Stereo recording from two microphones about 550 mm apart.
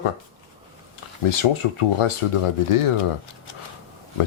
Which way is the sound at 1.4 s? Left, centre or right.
Left.